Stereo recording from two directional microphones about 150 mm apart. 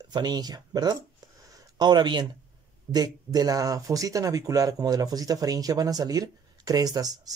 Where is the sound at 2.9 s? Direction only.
25° right (ahead or behind).